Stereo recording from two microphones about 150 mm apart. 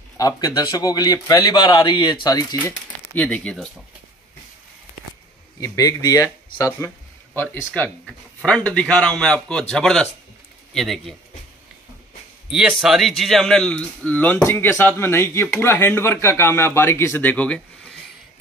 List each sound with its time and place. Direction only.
0.2 s speech: 25° left (ahead or behind)
3.2 s speech: 10° left (ahead or behind)
5.6 s speech: 25° left (ahead or behind)
8.0 s speech: centre (ahead or behind)
12.4 s speech: 5° right (ahead or behind)